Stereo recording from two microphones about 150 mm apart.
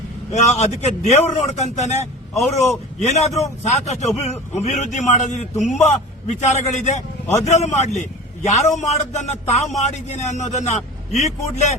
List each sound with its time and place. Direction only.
0.3 s a man's voice: 50° left (ahead or behind)